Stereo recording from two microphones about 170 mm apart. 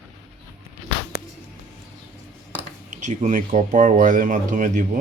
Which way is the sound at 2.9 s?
45° right (ahead or behind).